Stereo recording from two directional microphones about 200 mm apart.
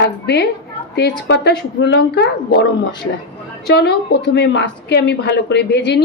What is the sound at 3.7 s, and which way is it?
Speech, 55° left (ahead or behind).